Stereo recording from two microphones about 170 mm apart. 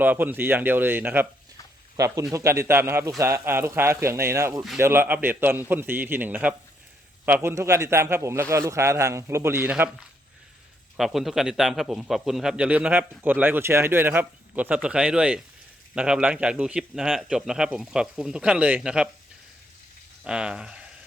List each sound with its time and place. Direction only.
0.0 s a man's voice: 10° right (ahead or behind)
20.2 s a man's voice: 5° right (ahead or behind)